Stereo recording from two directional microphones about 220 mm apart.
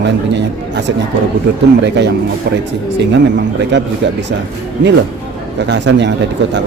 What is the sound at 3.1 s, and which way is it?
Speech, 55° right (ahead or behind).